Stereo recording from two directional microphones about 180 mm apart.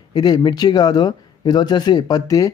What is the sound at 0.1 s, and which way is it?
Speech, 20° left (ahead or behind).